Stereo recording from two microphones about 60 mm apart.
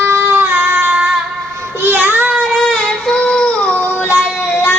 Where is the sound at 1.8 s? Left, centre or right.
Right.